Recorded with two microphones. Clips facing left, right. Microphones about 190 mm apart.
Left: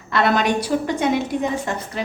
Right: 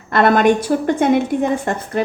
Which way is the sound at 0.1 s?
50° right (ahead or behind).